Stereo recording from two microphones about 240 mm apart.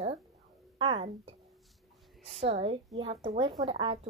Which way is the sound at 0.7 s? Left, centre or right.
Right.